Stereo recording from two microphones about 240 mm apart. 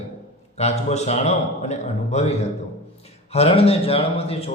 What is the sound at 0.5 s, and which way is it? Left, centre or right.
Mantra, left.